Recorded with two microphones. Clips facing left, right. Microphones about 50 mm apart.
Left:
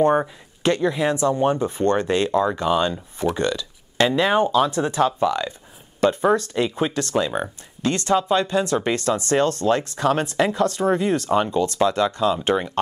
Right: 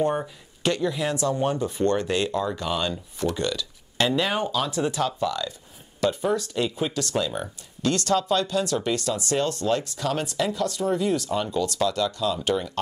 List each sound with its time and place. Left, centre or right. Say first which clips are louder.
0.0 s speech: left 7 dB; left